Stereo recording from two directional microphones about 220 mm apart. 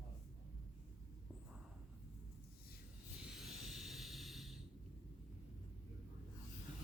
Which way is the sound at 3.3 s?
Centre (ahead or behind).